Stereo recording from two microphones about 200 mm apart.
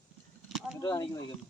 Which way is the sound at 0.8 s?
20° left (ahead or behind).